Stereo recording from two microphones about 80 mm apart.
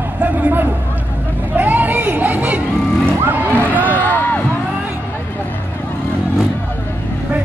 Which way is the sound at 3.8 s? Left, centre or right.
Left.